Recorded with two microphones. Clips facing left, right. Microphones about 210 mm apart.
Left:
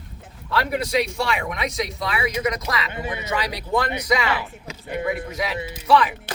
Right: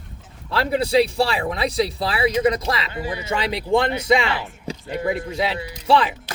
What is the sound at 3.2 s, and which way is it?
Speech, 25° right (ahead or behind).